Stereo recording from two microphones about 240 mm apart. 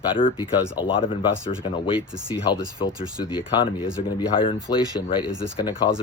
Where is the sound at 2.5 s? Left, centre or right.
Centre.